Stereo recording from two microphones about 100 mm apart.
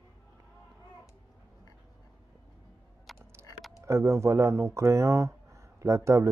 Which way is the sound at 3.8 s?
30° right (ahead or behind).